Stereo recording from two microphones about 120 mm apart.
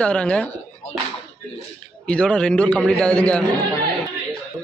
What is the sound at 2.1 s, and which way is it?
Speech, 10° left (ahead or behind).